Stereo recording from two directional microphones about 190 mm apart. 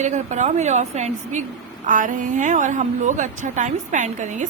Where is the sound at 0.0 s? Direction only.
40° right (ahead or behind).